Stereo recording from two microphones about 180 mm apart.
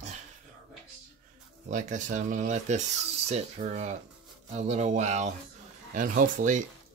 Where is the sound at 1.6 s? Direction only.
45° right (ahead or behind).